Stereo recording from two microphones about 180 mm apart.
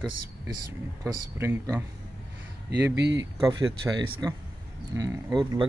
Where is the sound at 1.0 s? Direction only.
15° right (ahead or behind).